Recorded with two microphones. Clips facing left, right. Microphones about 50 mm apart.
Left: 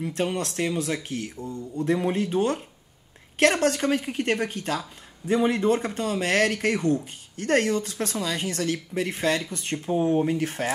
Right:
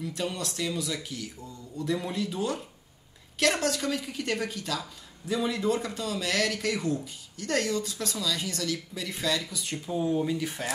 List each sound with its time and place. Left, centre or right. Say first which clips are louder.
0.0 s a woman's voice: left 6 dB; left